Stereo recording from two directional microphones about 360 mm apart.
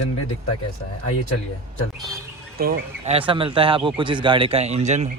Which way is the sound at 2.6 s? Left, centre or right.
Right.